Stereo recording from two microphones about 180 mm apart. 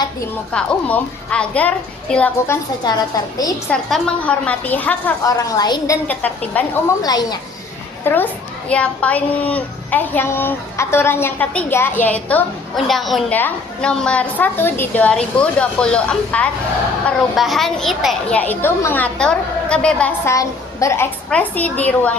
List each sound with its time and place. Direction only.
0.5 s speech: 5° left (ahead or behind)
3.7 s speech: 5° left (ahead or behind); by 6.0 s 20° left (ahead or behind)
6.1 s speech: 10° left (ahead or behind)
7.0 s a woman's voice: 20° left (ahead or behind)
8.0 s a woman's voice: 10° left (ahead or behind)
20.3 s a woman's voice: 20° left (ahead or behind)